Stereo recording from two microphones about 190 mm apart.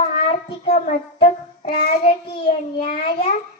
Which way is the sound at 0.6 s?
55° left (ahead or behind).